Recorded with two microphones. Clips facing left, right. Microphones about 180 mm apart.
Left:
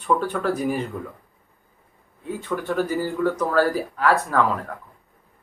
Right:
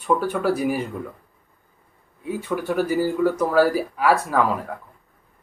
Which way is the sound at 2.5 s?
10° right (ahead or behind).